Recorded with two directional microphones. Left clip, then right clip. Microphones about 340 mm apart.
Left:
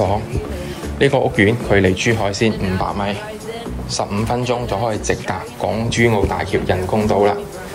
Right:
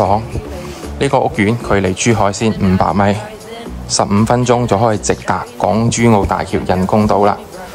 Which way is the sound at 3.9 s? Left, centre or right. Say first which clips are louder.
Right 7 dB; centre.